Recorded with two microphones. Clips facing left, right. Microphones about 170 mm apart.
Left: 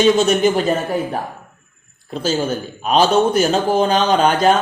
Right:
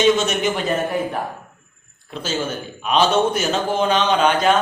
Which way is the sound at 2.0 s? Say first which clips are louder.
Left 5 dB; 40° left (ahead or behind).